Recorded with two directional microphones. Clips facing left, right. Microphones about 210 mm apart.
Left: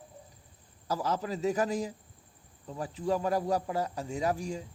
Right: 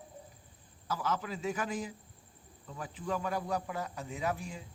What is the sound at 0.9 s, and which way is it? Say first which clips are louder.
Speech: left 4 dB; 35° left (ahead or behind).